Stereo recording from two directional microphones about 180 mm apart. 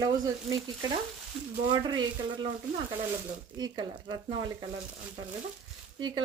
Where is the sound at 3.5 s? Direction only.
20° right (ahead or behind).